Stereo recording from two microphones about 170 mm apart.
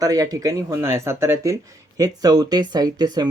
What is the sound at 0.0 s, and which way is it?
Speech, 20° right (ahead or behind).